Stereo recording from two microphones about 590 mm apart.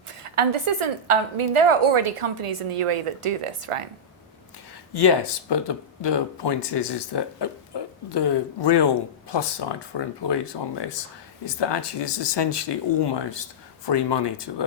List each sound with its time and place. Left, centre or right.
0.2 s a woman's voice: right
4.9 s speech: left